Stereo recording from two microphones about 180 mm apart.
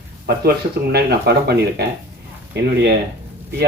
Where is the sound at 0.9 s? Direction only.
65° right (ahead or behind).